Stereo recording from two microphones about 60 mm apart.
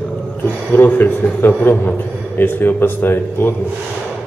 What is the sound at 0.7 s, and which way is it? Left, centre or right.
A man's voice, left.